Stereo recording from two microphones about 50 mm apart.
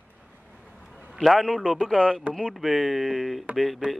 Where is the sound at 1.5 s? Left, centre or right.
Centre.